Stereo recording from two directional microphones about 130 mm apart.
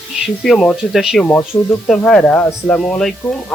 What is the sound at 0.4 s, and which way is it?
Speech, 5° left (ahead or behind).